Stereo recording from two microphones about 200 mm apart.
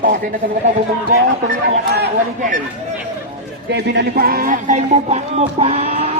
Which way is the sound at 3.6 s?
55° right (ahead or behind).